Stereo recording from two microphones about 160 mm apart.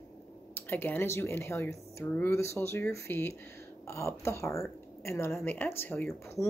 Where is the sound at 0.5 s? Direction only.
15° left (ahead or behind).